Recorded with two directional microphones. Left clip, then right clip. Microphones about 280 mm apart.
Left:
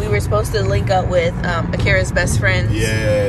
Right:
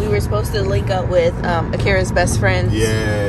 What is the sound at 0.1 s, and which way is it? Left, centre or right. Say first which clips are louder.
Speech: left 1 dB; centre.